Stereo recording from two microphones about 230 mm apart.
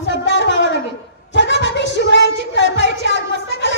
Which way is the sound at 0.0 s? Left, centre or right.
Left.